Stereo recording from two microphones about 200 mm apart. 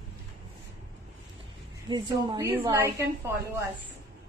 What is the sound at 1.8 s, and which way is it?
A woman's voice, 20° right (ahead or behind).